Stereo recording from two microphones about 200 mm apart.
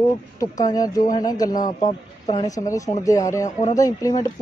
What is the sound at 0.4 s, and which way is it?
A man's voice, 20° left (ahead or behind).